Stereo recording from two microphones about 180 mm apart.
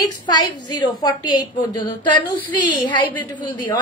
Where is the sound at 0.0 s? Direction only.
20° left (ahead or behind).